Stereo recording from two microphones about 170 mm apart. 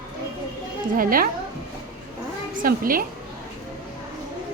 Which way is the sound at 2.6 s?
55° right (ahead or behind).